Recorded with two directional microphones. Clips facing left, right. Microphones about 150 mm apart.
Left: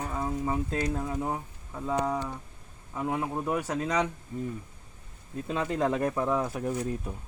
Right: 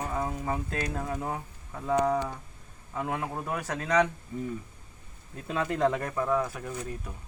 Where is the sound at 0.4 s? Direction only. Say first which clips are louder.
Left 3 dB; 15° left (ahead or behind).